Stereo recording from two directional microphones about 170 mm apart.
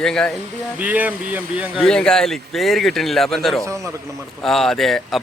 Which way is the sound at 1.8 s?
5° left (ahead or behind).